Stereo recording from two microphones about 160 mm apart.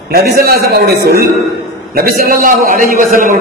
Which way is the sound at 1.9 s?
70° right (ahead or behind).